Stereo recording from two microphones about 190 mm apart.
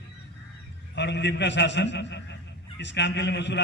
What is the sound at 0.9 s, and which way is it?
A man's voice, 65° left (ahead or behind).